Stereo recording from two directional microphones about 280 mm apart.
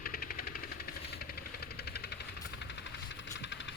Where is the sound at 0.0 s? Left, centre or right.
Left.